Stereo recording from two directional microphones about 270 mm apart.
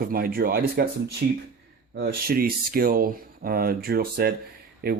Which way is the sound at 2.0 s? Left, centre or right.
Right.